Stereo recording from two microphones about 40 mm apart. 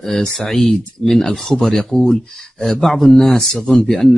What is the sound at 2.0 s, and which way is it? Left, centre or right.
Speech, centre.